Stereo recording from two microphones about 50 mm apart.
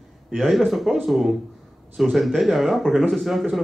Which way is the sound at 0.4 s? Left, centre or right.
Centre.